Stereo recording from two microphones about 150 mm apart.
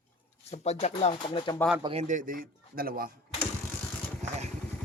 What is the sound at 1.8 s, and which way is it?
Speech, 45° right (ahead or behind).